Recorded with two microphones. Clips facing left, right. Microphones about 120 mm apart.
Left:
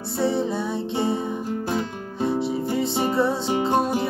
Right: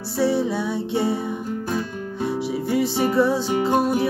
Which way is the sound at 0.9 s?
25° left (ahead or behind).